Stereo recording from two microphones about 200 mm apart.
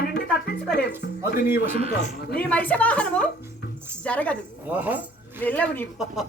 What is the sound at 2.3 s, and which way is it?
A woman's voice, 5° left (ahead or behind).